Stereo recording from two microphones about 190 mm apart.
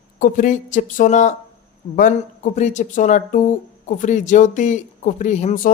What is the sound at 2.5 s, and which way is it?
Speech, 40° left (ahead or behind).